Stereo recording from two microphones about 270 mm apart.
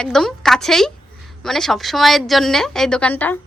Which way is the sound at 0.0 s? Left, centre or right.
Centre.